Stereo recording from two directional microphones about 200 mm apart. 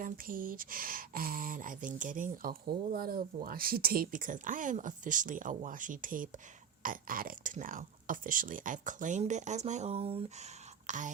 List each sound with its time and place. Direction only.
0.0 s speech: 45° right (ahead or behind)